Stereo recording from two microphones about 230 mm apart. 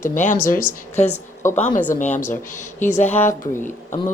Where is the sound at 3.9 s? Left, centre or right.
Left.